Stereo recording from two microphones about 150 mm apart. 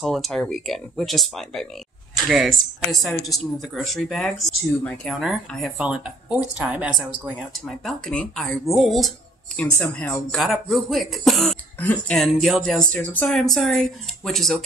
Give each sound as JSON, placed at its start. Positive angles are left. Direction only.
{"t": 0.0, "sound": "speech", "side_deg": 0}